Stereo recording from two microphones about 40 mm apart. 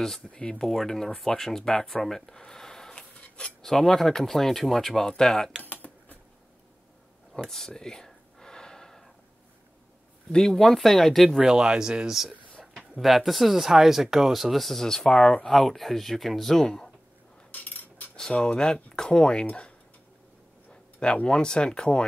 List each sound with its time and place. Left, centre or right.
0.3 s speech: left
0.6 s speech: centre
3.2 s cutlery: left
3.6 s speech: centre
5.6 s computer keyboard: left
7.3 s gasp: centre
10.3 s speech: centre
11.2 s speech: centre
11.5 s speech: right
12.1 s speech: centre
16.5 s speech: centre
17.5 s cutlery: left
18.4 s speech: left
20.7 s speech: left